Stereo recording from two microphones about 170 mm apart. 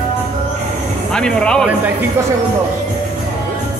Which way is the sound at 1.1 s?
5° left (ahead or behind).